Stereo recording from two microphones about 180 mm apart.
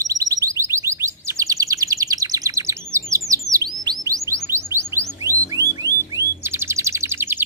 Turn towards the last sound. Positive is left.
turn(degrees=-10)  # may be behind; listen again after turning